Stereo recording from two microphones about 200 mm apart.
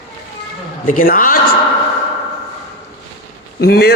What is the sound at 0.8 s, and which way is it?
Speech, 45° left (ahead or behind).